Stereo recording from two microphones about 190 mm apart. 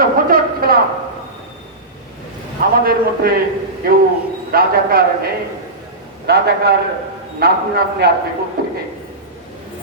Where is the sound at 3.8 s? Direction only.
50° right (ahead or behind).